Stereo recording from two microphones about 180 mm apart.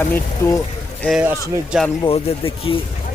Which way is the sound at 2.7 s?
25° left (ahead or behind).